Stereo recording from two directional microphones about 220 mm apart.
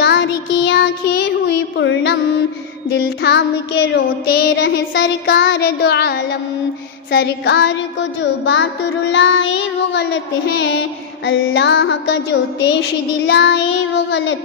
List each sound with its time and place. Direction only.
0.0 s child singing: 50° left (ahead or behind)
3.2 s music: 50° left (ahead or behind)